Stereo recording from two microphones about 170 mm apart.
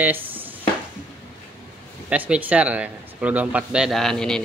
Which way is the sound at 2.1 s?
10° right (ahead or behind).